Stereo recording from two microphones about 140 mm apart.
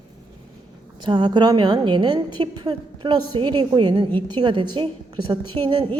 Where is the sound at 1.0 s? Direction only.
35° right (ahead or behind).